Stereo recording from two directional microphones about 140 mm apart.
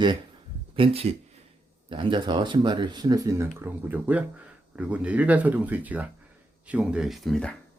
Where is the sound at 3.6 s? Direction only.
10° right (ahead or behind); by 7.5 s 5° left (ahead or behind).